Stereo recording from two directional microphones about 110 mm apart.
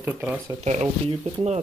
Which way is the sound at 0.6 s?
90° right.